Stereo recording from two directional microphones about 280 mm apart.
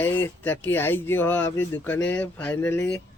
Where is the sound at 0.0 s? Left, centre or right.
Centre.